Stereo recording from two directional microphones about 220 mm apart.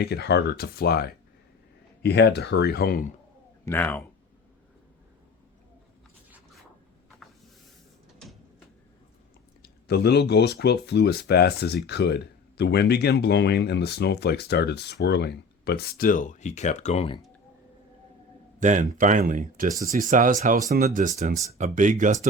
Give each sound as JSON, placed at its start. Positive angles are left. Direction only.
{"t": 0.0, "sound": "speech", "side_deg": 50}
{"t": 3.7, "sound": "speech", "side_deg": 10}
{"t": 9.6, "sound": "speech", "side_deg": 45}
{"t": 18.6, "sound": "speech", "side_deg": -35}